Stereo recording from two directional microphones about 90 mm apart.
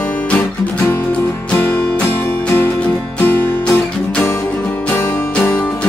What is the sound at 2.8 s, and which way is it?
Music, 15° left (ahead or behind).